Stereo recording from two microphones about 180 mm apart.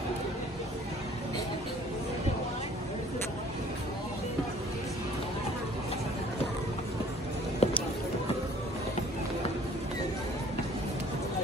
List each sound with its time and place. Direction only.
7.6 s run: 35° left (ahead or behind)